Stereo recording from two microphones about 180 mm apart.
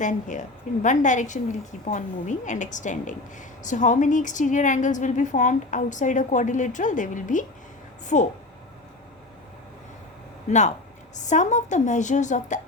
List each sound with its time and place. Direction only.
0.0 s a woman's voice: 45° left (ahead or behind)
10.5 s a woman's voice: 40° left (ahead or behind)